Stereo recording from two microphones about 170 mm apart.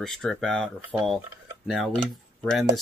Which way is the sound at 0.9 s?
10° right (ahead or behind).